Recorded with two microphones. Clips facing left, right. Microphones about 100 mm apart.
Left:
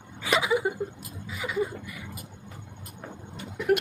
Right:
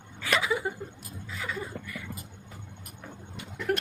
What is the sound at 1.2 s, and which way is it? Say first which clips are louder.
Chuckle: left 7 dB; 10° left (ahead or behind).